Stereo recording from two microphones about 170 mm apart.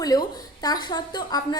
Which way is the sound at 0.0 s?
20° left (ahead or behind).